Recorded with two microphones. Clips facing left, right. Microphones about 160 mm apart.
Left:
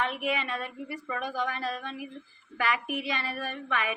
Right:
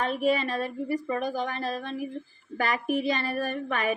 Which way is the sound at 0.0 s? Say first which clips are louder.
Right 5 dB; 35° right (ahead or behind).